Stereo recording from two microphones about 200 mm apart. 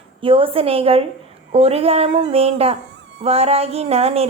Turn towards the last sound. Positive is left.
turn(degrees=-30)  # may be behind; listen again after turning